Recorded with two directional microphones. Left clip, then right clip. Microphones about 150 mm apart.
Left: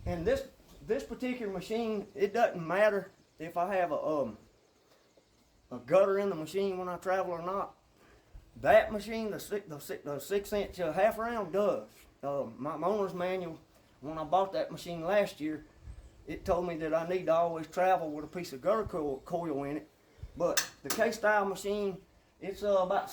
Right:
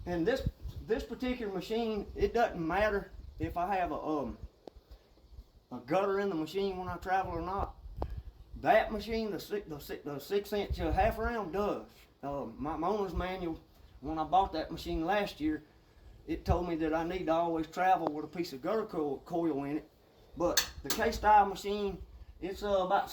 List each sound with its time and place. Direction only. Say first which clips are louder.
0.9 s speech: even; 30° left (ahead or behind)
5.6 s speech: left 5 dB; 25° left (ahead or behind)
8.6 s speech: left 3 dB; 30° left (ahead or behind)
21.1 s speech: right 7 dB; 25° left (ahead or behind)